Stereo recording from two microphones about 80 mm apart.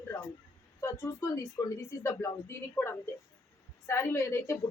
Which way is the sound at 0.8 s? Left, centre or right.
Left.